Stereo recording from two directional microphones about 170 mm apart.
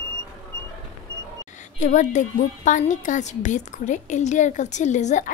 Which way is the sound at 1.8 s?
45° left (ahead or behind).